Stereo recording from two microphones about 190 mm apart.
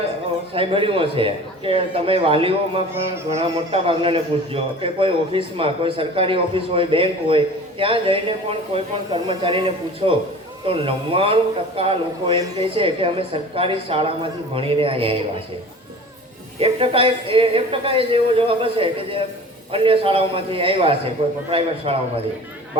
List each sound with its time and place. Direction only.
0.5 s a man's voice: 30° right (ahead or behind)
16.6 s a man's voice: 30° right (ahead or behind)